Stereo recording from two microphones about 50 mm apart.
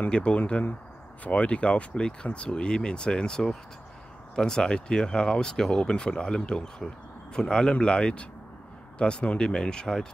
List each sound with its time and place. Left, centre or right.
0.1 s speech: left